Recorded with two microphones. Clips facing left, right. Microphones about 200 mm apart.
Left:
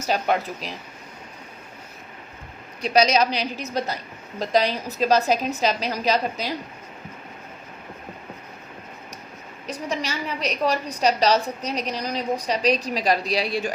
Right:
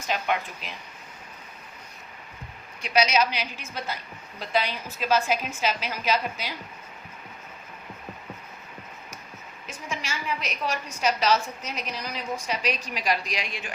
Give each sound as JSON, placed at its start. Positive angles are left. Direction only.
{"t": 0.0, "sound": "a woman's voice", "side_deg": 40}
{"t": 2.8, "sound": "a woman's voice", "side_deg": 35}
{"t": 9.6, "sound": "a woman's voice", "side_deg": 35}